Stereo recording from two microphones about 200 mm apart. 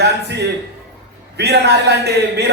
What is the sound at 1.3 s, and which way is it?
A man's voice, 55° right (ahead or behind).